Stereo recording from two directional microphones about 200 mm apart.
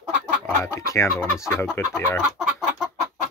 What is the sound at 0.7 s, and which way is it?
Speech, 15° left (ahead or behind).